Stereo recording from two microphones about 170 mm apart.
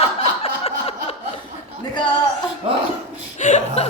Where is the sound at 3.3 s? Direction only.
45° left (ahead or behind).